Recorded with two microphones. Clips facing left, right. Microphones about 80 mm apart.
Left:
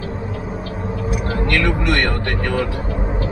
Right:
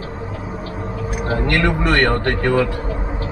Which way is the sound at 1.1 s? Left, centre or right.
Right.